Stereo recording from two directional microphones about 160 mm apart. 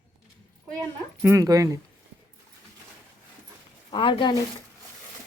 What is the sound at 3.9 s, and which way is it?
Speech, 30° left (ahead or behind).